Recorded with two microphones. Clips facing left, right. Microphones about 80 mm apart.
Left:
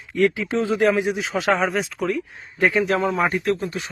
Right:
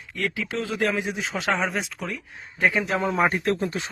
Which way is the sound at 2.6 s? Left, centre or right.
Centre.